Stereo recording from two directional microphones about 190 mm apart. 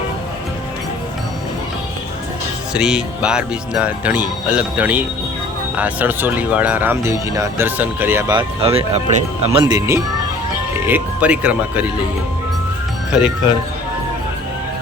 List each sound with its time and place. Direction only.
2.7 s speech: 5° right (ahead or behind)
8.3 s speech: 25° right (ahead or behind)
9.6 s speech: 15° right (ahead or behind)
13.1 s speech: 5° right (ahead or behind)